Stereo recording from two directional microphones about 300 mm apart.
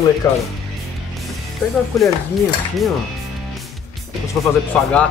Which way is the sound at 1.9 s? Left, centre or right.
Centre.